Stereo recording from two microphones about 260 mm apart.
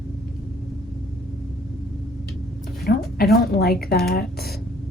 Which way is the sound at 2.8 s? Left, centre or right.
Left.